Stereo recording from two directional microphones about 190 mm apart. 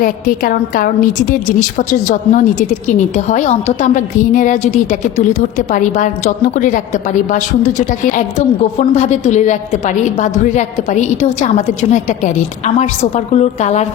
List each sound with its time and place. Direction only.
0.0 s a woman's voice: 45° left (ahead or behind)